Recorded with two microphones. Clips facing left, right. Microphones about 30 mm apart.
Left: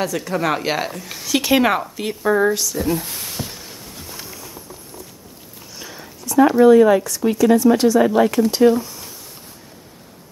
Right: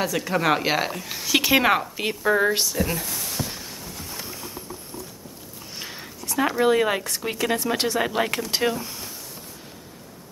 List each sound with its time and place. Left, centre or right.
0.0 s a woman's voice: centre
1.7 s a woman's voice: centre
2.5 s speech: right
3.1 s speech: left
5.8 s a sound: right
6.6 s speech: right
8.0 s speech: right